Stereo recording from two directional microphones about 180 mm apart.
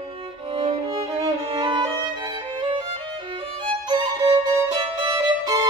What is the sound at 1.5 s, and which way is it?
Violin, 25° right (ahead or behind).